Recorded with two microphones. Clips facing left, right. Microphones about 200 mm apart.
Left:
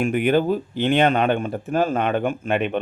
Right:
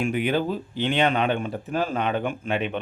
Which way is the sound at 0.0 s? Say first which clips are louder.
Left 5 dB; 50° left (ahead or behind).